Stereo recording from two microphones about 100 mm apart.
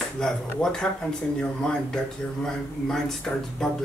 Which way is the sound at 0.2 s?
5° left (ahead or behind).